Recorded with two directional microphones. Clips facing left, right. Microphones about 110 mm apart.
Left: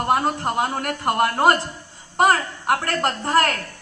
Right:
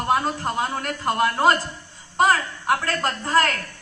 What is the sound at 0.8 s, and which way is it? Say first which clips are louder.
Speech: even; 55° left (ahead or behind).